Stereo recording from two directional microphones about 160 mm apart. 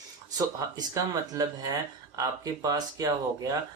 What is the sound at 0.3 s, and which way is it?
Speech, 25° right (ahead or behind).